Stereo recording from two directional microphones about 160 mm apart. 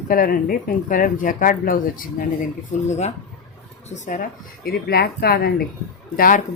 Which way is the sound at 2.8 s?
45° left (ahead or behind).